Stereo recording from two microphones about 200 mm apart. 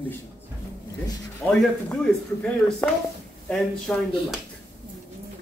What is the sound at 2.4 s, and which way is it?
Speech, 5° left (ahead or behind).